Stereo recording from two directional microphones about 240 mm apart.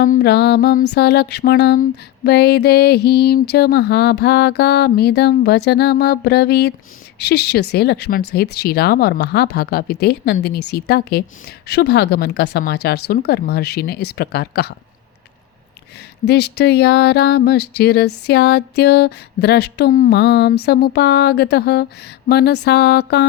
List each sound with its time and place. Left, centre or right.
0.0 s mantra: left
8.3 s a woman's voice: left
16.2 s mantra: left